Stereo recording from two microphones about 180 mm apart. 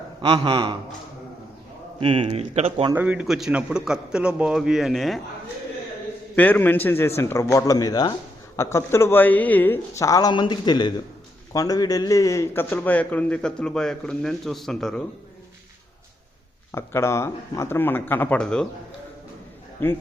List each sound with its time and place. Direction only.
0.2 s a man's voice: 30° right (ahead or behind)
2.0 s speech: 30° right (ahead or behind)
2.9 s a man's voice: 10° right (ahead or behind)
6.3 s a man's voice: 10° left (ahead or behind)
16.7 s a man's voice: 15° left (ahead or behind)
19.8 s a man's voice: 10° left (ahead or behind)